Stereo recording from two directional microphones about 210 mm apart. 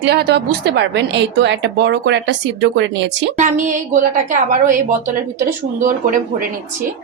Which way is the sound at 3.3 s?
35° right (ahead or behind).